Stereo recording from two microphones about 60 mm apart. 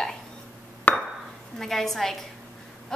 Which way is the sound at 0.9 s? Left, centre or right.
Left.